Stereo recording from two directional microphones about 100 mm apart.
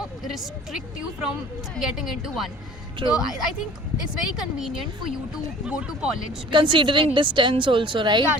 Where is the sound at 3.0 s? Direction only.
55° right (ahead or behind).